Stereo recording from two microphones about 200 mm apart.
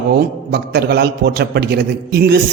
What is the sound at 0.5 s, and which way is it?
A man's voice, 55° right (ahead or behind).